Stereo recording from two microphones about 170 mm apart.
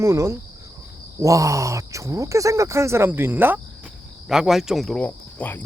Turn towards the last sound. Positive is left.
turn(degrees=10)  # may be behind; listen again after turning